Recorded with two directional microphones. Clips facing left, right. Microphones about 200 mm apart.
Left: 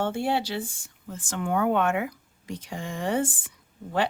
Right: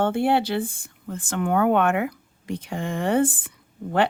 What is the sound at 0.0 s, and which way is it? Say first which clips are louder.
Speech: right 5 dB; 60° right (ahead or behind).